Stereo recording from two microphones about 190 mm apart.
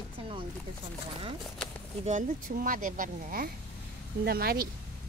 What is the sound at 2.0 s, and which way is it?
Speech, 40° right (ahead or behind).